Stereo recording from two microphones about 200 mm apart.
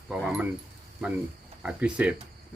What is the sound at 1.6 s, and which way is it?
Speech, 5° right (ahead or behind).